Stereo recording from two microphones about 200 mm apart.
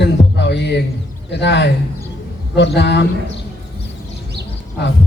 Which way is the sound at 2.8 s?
60° left (ahead or behind).